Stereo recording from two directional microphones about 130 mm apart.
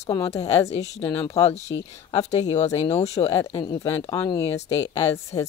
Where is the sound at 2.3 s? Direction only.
60° left (ahead or behind).